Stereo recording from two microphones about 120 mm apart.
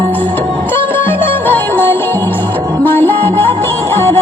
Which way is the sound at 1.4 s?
15° left (ahead or behind).